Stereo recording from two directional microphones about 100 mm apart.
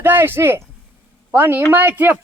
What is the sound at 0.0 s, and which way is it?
Speech, 20° right (ahead or behind).